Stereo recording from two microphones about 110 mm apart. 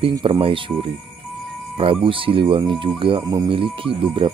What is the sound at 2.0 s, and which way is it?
Speech, 55° right (ahead or behind).